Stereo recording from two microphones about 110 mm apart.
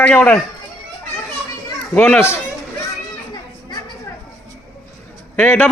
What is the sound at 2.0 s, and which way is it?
Speech, 20° left (ahead or behind).